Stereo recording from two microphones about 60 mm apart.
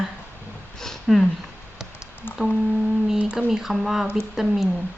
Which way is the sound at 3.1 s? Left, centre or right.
Centre.